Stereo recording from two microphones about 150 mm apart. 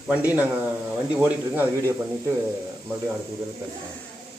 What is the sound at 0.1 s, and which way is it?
Speech, 10° right (ahead or behind).